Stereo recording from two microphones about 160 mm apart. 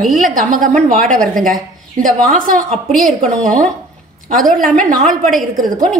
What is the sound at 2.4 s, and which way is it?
A woman's voice, 60° right (ahead or behind).